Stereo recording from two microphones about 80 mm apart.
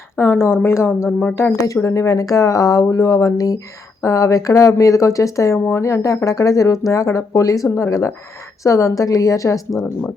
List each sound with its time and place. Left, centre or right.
0.2 s speech: left
5.5 s speech: left